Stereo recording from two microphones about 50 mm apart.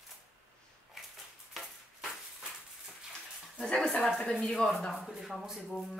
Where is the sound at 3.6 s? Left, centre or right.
Centre.